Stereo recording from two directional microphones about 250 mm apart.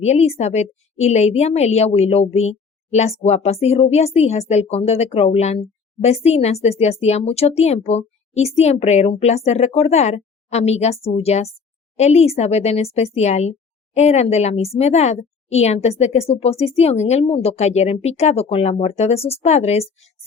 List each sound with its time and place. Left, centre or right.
0.0 s a woman's voice: left